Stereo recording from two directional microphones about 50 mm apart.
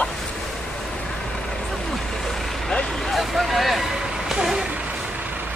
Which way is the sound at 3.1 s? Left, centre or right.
Centre.